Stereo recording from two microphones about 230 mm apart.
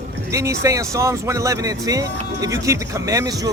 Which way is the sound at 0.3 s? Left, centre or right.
Centre.